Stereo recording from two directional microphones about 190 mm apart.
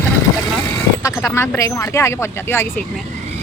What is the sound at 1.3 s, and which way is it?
Speech, 15° left (ahead or behind).